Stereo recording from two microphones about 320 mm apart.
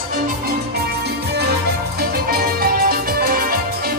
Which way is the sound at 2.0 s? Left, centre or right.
Right.